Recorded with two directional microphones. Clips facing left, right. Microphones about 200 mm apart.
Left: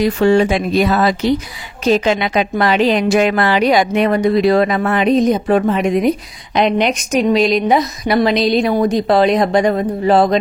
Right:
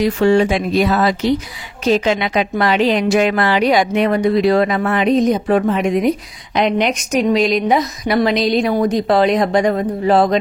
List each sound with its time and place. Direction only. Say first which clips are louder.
0.0 s speech: left 1 dB; 40° left (ahead or behind)